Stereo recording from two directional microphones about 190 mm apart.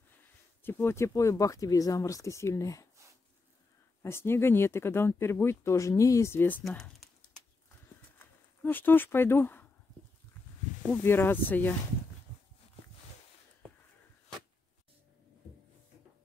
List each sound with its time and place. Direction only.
0.7 s speech: 10° left (ahead or behind)
4.0 s speech: 15° left (ahead or behind)
8.6 s speech: 10° left (ahead or behind)
10.9 s speech: 10° left (ahead or behind)